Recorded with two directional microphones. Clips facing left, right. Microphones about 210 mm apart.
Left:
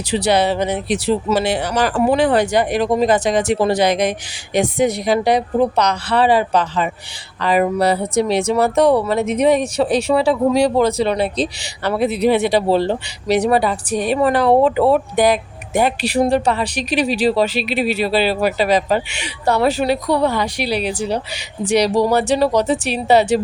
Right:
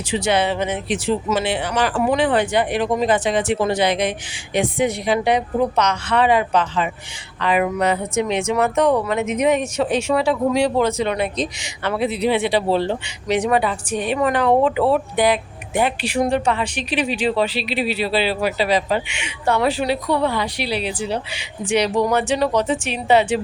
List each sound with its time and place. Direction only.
0.1 s speech: 35° left (ahead or behind)